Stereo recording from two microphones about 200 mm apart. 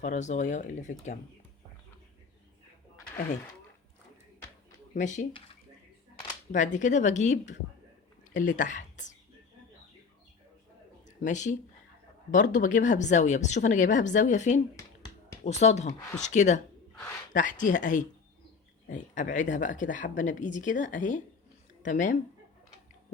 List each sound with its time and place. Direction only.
0.0 s speech: 35° left (ahead or behind)
4.9 s speech: 40° left (ahead or behind)
6.5 s speech: 40° left (ahead or behind)
11.0 s a sound: 35° left (ahead or behind)
12.3 s speech: 40° left (ahead or behind)
14.8 s a sound: 15° left (ahead or behind)
15.4 s speech: 35° left (ahead or behind)